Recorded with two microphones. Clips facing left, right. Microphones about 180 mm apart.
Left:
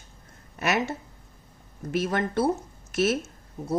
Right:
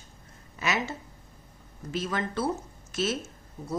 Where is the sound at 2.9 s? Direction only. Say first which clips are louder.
Left 5 dB; 65° left (ahead or behind).